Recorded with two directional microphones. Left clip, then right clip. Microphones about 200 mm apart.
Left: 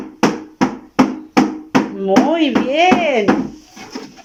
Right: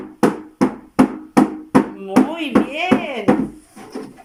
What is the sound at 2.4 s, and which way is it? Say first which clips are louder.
Speech: left 5 dB; 35° left (ahead or behind).